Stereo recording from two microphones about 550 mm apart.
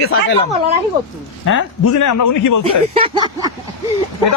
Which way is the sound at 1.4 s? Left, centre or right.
Left.